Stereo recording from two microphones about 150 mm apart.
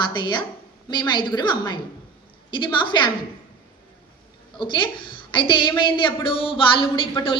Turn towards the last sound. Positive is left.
turn(degrees=35)  # may be behind; listen again after turning